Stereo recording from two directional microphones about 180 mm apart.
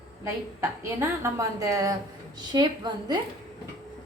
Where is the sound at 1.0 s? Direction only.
15° right (ahead or behind).